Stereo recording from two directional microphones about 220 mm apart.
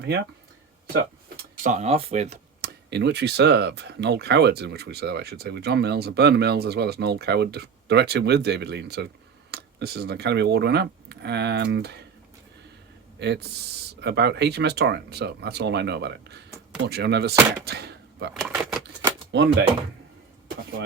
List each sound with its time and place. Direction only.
1.6 s speech: 30° right (ahead or behind)
2.6 s speech: 50° right (ahead or behind)
13.1 s speech: 50° right (ahead or behind)
17.7 s a sound: 50° right (ahead or behind)
18.5 s speech: 10° right (ahead or behind)
19.3 s speech: 50° right (ahead or behind)